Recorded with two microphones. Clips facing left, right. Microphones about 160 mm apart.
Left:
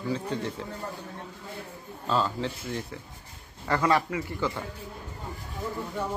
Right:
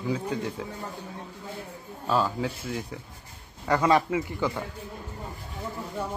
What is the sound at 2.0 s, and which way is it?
A man's voice, 10° right (ahead or behind).